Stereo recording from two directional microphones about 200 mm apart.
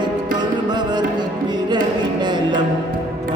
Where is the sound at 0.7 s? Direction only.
20° right (ahead or behind).